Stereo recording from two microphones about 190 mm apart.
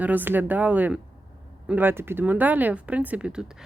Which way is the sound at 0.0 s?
10° right (ahead or behind).